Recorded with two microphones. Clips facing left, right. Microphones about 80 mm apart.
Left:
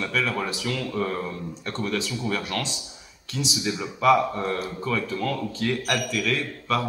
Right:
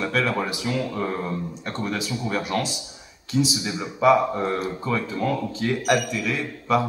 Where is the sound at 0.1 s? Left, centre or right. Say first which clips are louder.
Right 3 dB; centre.